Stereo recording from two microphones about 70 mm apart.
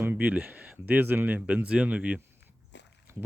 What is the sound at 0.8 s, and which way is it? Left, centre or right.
Speech, right.